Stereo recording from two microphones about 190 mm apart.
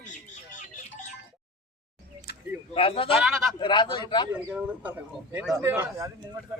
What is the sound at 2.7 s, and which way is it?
Speech, 30° left (ahead or behind).